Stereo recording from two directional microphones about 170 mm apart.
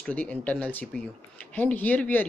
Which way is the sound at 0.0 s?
10° left (ahead or behind).